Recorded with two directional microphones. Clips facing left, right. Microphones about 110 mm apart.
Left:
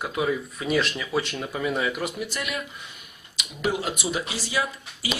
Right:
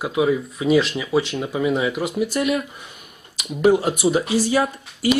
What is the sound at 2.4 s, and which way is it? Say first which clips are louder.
Speech: right 10 dB; 30° right (ahead or behind).